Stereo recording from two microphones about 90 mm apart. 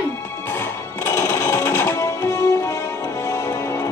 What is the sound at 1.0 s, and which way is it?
Music, 30° left (ahead or behind).